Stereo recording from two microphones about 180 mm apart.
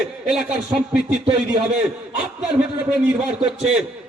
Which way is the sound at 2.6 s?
5° right (ahead or behind).